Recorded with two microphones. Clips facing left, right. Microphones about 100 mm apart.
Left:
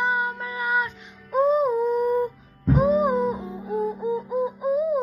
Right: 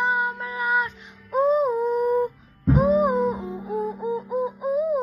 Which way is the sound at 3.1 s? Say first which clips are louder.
Right 1 dB; centre (ahead or behind).